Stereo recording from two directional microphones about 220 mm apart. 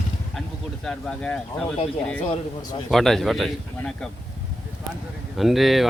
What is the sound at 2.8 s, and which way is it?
Speech, centre (ahead or behind).